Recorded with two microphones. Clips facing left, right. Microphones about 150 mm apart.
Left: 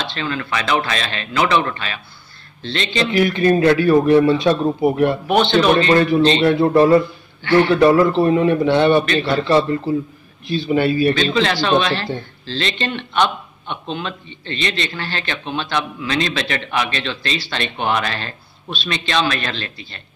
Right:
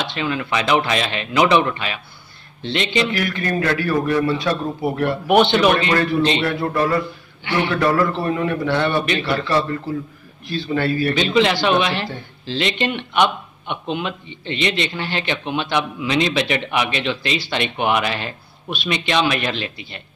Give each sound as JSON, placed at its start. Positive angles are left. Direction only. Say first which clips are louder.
{"t": 0.0, "sound": "speech", "louder": "right 1 dB", "side_deg": -15}
{"t": 3.1, "sound": "a man's voice", "louder": "left 7 dB", "side_deg": 20}
{"t": 5.2, "sound": "speech", "louder": "right 1 dB", "side_deg": -15}
{"t": 6.4, "sound": "a man's voice", "louder": "left 7 dB", "side_deg": 25}
{"t": 11.1, "sound": "speech", "louder": "right 1 dB", "side_deg": -15}